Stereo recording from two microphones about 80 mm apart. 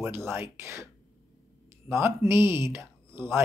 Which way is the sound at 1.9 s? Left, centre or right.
Right.